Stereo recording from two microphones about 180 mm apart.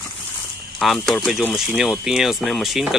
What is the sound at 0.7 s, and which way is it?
Speech, centre (ahead or behind).